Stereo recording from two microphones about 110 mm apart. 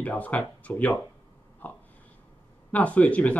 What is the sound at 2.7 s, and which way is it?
Speech, 15° left (ahead or behind).